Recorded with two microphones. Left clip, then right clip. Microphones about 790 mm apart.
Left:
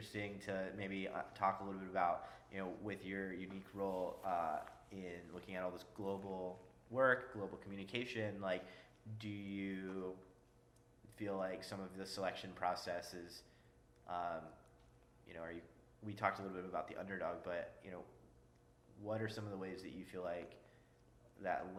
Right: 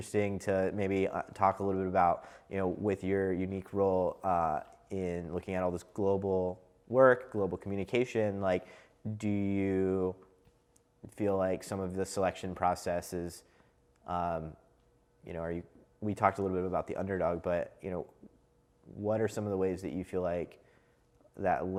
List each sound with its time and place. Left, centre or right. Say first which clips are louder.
0.1 s speech: right 14 dB; right
11.1 s speech: right 12 dB; right
19.0 s speech: right 12 dB; right